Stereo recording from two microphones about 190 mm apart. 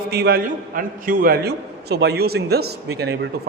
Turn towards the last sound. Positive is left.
turn(degrees=-60)  # may be behind; listen again after turning